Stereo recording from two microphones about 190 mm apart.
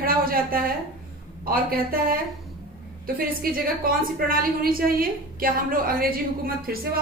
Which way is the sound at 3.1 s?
50° right (ahead or behind).